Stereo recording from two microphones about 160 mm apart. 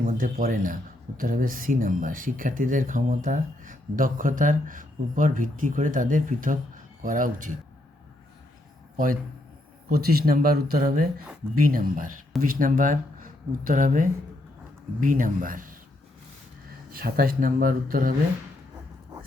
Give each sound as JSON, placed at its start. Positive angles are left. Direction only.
{"t": 0.0, "sound": "speech", "side_deg": -60}
{"t": 9.9, "sound": "speech", "side_deg": -75}
{"t": 16.9, "sound": "speech", "side_deg": -65}